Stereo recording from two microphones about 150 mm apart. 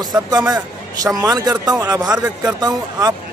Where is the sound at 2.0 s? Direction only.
5° right (ahead or behind).